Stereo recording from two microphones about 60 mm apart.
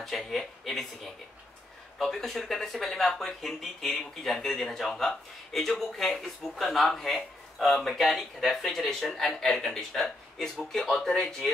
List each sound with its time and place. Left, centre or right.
0.0 s speech: centre